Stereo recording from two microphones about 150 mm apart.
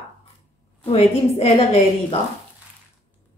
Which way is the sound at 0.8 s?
40° left (ahead or behind).